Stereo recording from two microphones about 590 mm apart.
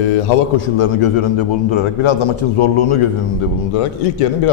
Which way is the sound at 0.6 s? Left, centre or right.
Left.